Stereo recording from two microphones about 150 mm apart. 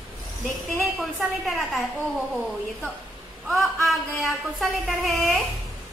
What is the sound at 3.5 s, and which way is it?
Speech, centre (ahead or behind).